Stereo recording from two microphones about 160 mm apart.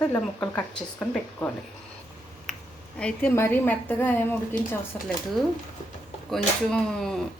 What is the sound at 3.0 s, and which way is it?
Speech, 10° left (ahead or behind).